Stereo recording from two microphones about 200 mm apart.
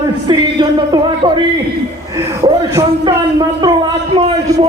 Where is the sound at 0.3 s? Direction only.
20° right (ahead or behind).